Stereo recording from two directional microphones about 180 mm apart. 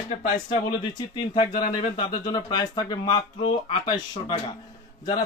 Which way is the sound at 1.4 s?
25° left (ahead or behind).